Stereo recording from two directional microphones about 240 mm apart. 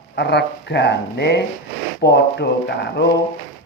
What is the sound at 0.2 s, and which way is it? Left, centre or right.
A man's voice, left.